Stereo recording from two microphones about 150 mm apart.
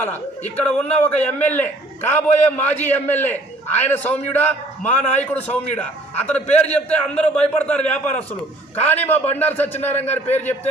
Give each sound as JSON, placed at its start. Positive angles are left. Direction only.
{"t": 0.0, "sound": "a man's voice", "side_deg": 10}
{"t": 4.8, "sound": "a man's voice", "side_deg": 50}
{"t": 5.2, "sound": "a man's voice", "side_deg": 10}